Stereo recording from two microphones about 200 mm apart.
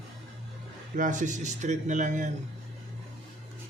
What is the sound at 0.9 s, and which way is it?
A man's voice, 40° right (ahead or behind).